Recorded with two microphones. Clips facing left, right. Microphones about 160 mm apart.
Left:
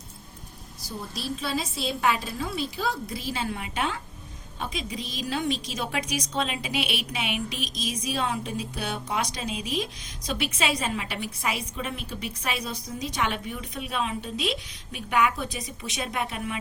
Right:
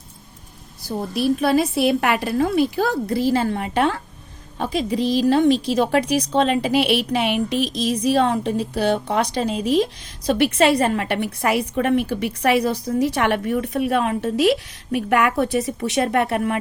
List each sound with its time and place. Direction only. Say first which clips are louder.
0.9 s a woman's voice: right 13 dB; 60° right (ahead or behind)